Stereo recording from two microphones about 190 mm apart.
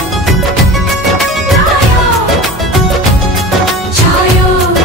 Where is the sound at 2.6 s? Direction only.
Centre (ahead or behind).